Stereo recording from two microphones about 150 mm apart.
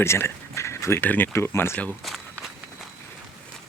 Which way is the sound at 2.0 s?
Centre (ahead or behind).